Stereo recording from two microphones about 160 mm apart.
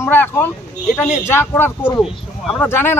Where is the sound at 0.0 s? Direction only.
15° left (ahead or behind).